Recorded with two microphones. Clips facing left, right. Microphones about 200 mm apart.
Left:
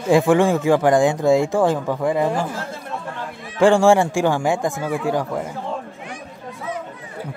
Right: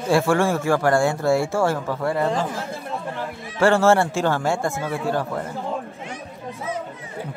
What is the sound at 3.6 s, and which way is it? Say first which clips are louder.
Speech: left 3 dB; 15° left (ahead or behind).